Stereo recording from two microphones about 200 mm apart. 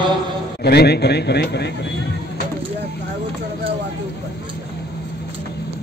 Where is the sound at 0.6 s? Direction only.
55° left (ahead or behind).